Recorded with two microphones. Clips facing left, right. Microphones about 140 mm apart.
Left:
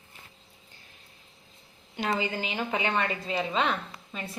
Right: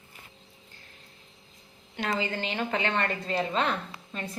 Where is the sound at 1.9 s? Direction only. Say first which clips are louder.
Left 1 dB; 15° left (ahead or behind).